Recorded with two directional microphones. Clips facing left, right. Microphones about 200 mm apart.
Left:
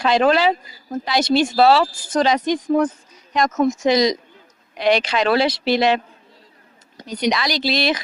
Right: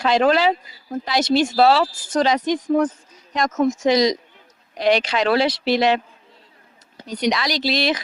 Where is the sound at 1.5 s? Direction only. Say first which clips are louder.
Left 2 dB; 45° right (ahead or behind).